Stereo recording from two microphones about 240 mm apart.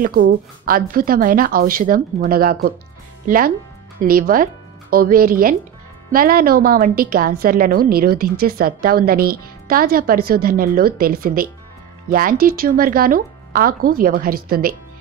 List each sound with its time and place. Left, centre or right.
0.0 s a woman's voice: right